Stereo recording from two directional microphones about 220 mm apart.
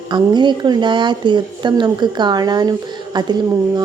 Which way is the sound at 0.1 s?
20° right (ahead or behind).